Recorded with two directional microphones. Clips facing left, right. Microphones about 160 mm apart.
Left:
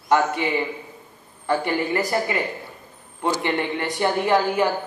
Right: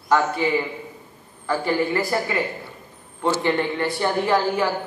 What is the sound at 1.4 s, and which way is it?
Speech, 20° left (ahead or behind).